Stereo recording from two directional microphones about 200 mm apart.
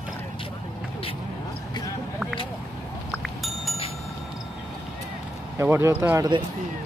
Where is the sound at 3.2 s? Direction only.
Centre (ahead or behind).